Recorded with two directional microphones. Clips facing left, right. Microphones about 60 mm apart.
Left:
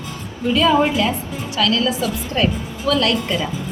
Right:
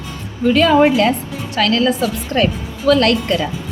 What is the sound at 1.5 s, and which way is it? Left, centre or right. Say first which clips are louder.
A woman's voice: right 3 dB; right.